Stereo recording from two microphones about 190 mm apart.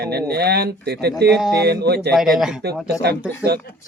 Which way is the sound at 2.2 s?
Centre (ahead or behind).